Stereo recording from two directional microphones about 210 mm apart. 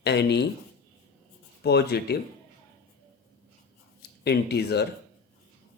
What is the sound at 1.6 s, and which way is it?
Speech, 50° left (ahead or behind).